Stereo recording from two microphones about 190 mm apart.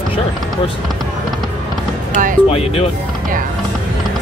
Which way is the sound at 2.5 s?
30° left (ahead or behind).